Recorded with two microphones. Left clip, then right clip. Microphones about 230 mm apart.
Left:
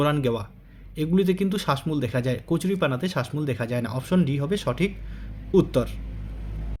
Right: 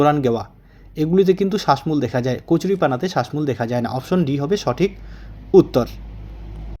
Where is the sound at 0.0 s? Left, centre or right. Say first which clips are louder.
Right 7 dB; centre.